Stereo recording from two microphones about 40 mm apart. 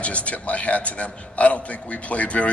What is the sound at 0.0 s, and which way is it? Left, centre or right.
Speech, left.